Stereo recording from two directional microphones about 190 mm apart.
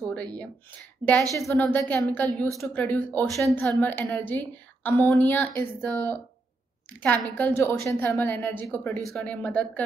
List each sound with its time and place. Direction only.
0.1 s a woman's voice: 5° left (ahead or behind)
1.0 s a woman's voice: 20° right (ahead or behind)
1.5 s a woman's voice: 10° left (ahead or behind)